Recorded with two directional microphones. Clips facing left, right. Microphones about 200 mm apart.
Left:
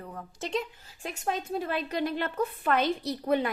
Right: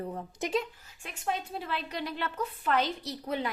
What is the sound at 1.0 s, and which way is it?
A woman's voice, 40° left (ahead or behind).